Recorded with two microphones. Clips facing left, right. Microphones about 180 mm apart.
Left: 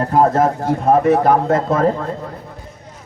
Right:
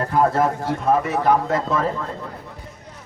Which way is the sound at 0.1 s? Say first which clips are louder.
Left 4 dB; 40° left (ahead or behind).